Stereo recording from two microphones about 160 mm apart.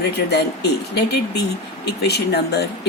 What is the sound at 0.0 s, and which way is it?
Speech, 90° left.